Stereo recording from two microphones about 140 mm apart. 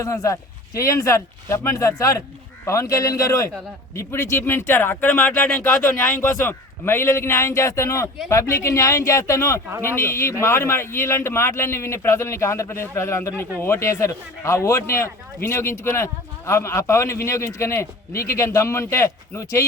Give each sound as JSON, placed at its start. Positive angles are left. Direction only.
{"t": 0.0, "sound": "a man's voice", "side_deg": 20}